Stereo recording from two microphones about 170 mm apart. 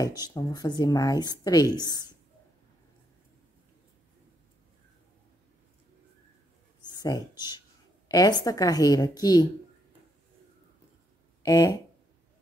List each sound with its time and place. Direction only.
0.2 s speech: 25° left (ahead or behind)
6.8 s a sound: 25° left (ahead or behind)
8.1 s speech: 20° left (ahead or behind)
11.4 s speech: 20° left (ahead or behind)